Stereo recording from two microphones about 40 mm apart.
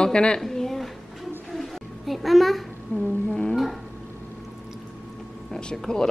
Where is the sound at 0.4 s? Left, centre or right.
Centre.